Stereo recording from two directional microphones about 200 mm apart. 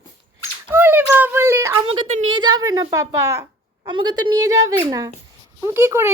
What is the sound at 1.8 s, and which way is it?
A woman's voice, 25° right (ahead or behind).